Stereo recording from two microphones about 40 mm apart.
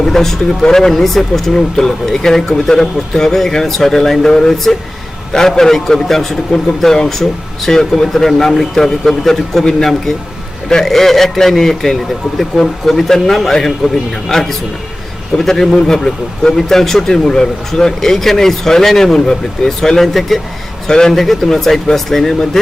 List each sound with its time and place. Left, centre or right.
0.0 s a man's voice: centre
20.8 s speech: centre
21.1 s a man's voice: centre